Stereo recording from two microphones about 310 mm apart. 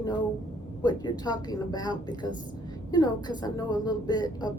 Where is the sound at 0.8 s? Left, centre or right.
Centre.